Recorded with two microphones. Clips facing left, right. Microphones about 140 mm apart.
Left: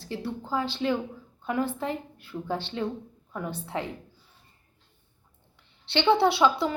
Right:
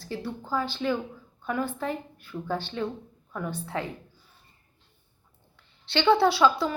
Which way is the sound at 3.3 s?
20° left (ahead or behind).